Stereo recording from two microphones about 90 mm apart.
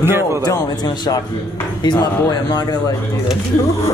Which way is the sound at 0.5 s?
45° left (ahead or behind).